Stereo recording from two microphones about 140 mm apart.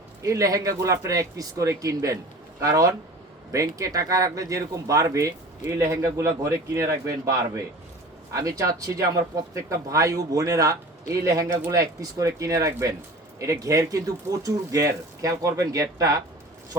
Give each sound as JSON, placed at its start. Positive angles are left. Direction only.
{"t": 0.2, "sound": "speech", "side_deg": -25}